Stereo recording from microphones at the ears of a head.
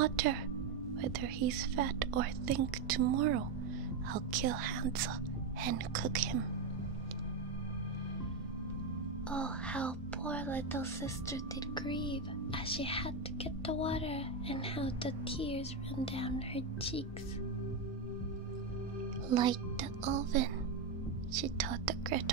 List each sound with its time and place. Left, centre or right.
0.0 s music: right
1.0 s speech: right
13.7 s speech: left
19.2 s a child's voice: right